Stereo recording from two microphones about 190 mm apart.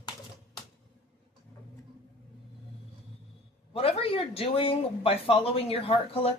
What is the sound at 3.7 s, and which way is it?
Speech, 30° left (ahead or behind).